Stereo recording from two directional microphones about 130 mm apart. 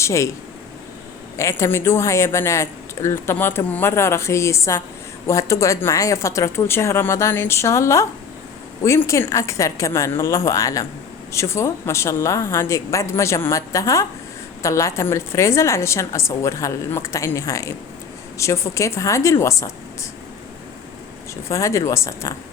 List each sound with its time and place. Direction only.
0.0 s speech: 25° left (ahead or behind)
1.4 s speech: 20° left (ahead or behind)
21.5 s speech: 25° left (ahead or behind)